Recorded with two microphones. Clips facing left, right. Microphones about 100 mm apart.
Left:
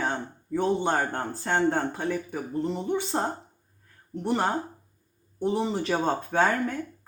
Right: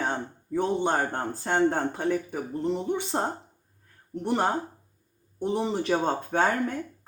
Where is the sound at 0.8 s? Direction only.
20° right (ahead or behind).